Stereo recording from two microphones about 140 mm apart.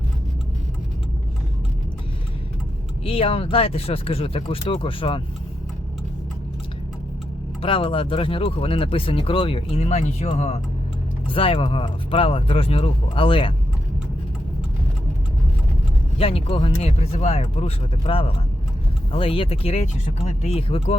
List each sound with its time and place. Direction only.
3.0 s speech: 40° left (ahead or behind)
7.6 s speech: 40° left (ahead or behind)
11.3 s speech: 40° left (ahead or behind)
16.1 s speech: 45° left (ahead or behind)